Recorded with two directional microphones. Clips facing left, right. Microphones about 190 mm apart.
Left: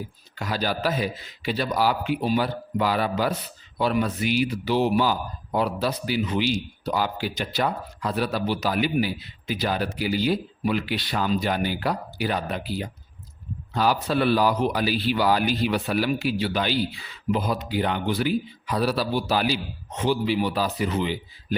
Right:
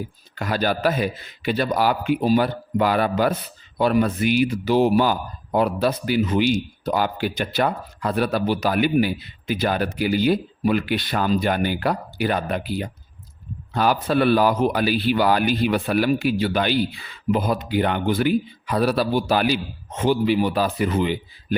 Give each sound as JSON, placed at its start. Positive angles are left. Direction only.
{"t": 0.3, "sound": "speech", "side_deg": -55}